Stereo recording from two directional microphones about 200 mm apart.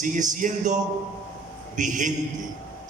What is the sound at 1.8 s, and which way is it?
Speech, 40° right (ahead or behind).